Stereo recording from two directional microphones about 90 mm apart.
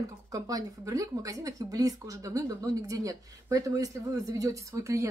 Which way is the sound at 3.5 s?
40° right (ahead or behind).